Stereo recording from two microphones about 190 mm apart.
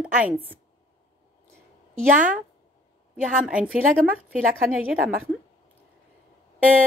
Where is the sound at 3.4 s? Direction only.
5° right (ahead or behind).